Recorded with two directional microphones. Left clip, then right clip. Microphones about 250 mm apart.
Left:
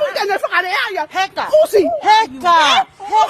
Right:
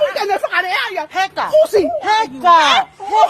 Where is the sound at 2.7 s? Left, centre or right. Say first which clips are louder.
Even; left.